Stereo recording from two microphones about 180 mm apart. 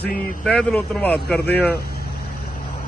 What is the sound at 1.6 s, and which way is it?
Speech, 60° left (ahead or behind).